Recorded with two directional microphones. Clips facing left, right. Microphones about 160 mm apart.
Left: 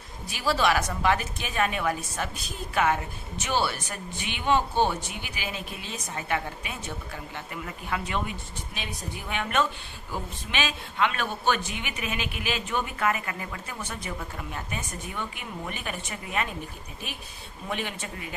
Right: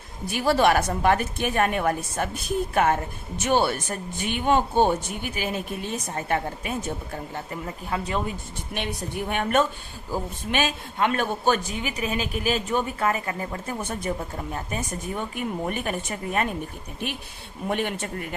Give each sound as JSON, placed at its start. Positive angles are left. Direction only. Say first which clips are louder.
{"t": 0.3, "sound": "a woman's voice", "louder": "right 5 dB", "side_deg": -55}
{"t": 8.7, "sound": "a woman's voice", "louder": "right 8 dB", "side_deg": -60}
{"t": 9.2, "sound": "a woman's voice", "louder": "right 5 dB", "side_deg": -45}
{"t": 14.2, "sound": "a woman's voice", "louder": "right 4 dB", "side_deg": -35}
{"t": 17.7, "sound": "a woman's voice", "louder": "right 6 dB", "side_deg": -55}